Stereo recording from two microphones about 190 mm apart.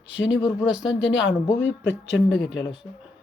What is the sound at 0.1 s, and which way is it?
Speech, 80° left.